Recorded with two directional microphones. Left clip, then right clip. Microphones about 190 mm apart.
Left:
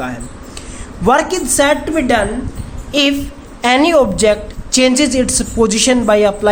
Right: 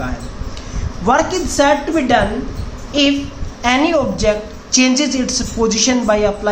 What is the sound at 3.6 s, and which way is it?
A woman's voice, 50° left (ahead or behind).